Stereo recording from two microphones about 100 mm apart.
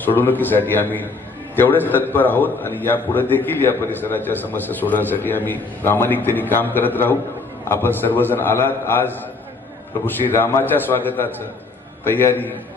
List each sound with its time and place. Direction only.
0.0 s a man's voice: 20° left (ahead or behind)